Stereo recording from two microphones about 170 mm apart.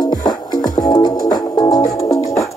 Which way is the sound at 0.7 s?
20° left (ahead or behind).